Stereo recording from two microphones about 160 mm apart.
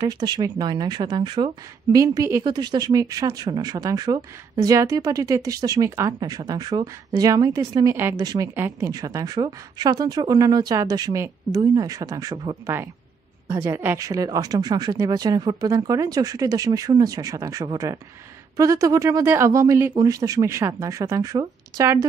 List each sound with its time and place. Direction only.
0.0 s speech: 25° right (ahead or behind)